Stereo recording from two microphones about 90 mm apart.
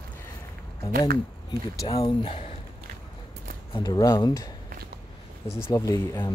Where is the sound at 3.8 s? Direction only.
50° left (ahead or behind).